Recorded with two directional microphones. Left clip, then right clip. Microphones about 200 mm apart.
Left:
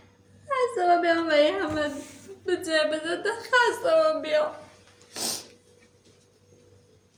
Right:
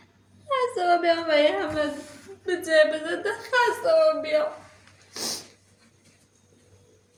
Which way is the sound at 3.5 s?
15° left (ahead or behind).